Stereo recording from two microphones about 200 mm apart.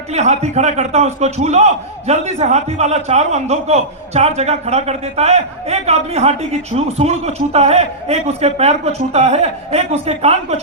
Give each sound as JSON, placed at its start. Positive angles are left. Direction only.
{"t": 0.1, "sound": "a man's voice", "side_deg": -35}